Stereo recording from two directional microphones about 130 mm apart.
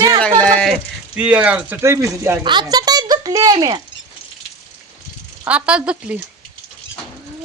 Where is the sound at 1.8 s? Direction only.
20° right (ahead or behind).